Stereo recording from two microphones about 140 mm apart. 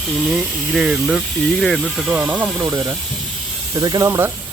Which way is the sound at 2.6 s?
20° right (ahead or behind).